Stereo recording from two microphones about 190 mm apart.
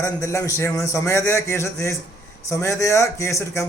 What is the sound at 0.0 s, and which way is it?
Speech, 15° left (ahead or behind).